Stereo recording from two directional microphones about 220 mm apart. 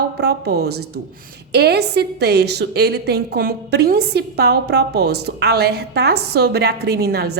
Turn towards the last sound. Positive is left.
turn(degrees=-45)  # may be behind; listen again after turning